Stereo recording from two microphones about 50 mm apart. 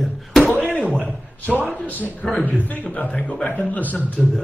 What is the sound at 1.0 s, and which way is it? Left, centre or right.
A man's voice, left.